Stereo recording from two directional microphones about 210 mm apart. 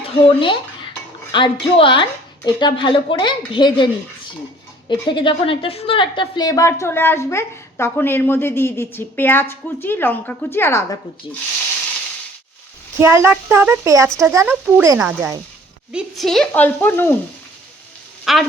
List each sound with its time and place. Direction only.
0.0 s speech: 25° left (ahead or behind)
4.9 s a woman's voice: 20° left (ahead or behind)
13.0 s speech: 10° right (ahead or behind); by 17.2 s 10° left (ahead or behind)
18.3 s speech: centre (ahead or behind)